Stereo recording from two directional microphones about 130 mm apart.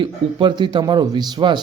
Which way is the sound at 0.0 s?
40° right (ahead or behind).